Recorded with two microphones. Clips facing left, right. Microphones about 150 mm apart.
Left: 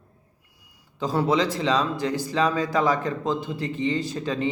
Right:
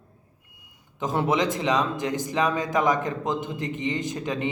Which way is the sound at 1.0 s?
20° right (ahead or behind).